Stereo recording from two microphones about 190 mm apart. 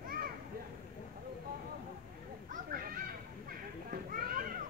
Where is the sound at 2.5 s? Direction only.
50° right (ahead or behind).